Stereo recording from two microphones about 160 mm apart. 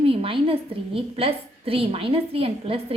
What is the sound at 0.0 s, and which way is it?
A woman's voice, 35° right (ahead or behind).